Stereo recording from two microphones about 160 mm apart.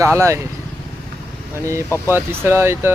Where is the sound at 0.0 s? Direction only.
15° right (ahead or behind).